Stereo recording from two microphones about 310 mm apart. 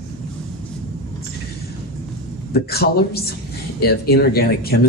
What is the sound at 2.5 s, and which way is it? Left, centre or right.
A man's voice, left.